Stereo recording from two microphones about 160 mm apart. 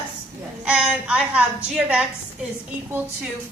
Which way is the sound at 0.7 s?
5° right (ahead or behind).